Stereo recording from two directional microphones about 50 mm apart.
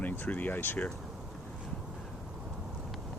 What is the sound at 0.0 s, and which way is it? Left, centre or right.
Speech, left.